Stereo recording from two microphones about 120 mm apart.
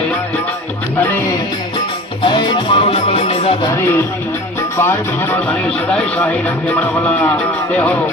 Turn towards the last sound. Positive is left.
turn(degrees=10)  # may be behind; listen again after turning